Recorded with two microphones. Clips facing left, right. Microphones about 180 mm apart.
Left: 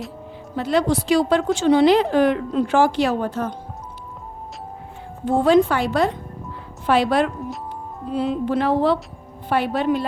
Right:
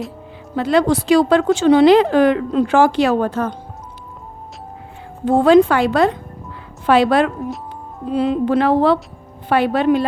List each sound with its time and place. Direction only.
0.5 s speech: 90° right
5.2 s a woman's voice: 90° right